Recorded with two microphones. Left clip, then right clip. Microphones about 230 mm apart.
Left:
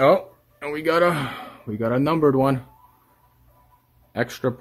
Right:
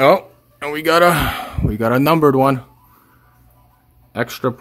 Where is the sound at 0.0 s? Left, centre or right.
Centre.